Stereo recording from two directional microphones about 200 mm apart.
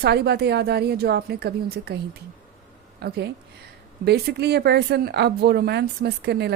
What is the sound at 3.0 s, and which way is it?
Speech, 55° right (ahead or behind).